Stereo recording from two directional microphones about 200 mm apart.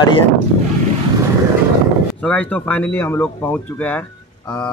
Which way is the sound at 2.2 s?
5° left (ahead or behind).